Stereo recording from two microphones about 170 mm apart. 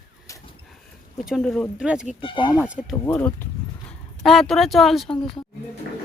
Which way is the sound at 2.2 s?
30° left (ahead or behind).